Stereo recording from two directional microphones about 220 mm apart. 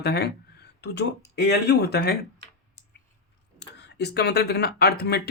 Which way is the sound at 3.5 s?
50° left (ahead or behind).